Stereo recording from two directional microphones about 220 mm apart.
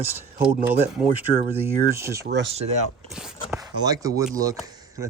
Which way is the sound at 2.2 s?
50° right (ahead or behind).